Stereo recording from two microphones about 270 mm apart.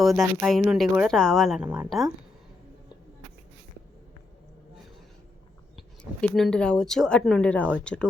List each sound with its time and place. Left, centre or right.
0.0 s speech: centre
5.7 s speech: centre